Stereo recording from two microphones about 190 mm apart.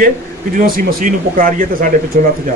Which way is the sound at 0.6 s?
45° right (ahead or behind).